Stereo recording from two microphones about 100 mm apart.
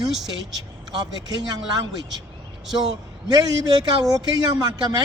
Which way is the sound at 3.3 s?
40° right (ahead or behind).